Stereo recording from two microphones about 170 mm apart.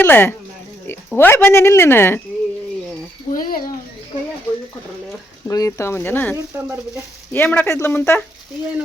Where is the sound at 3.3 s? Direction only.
60° left (ahead or behind).